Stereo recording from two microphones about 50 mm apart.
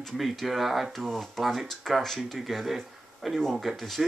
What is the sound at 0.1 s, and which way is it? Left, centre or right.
Speech, centre.